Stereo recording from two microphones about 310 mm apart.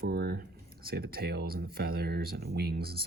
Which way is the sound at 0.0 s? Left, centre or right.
Right.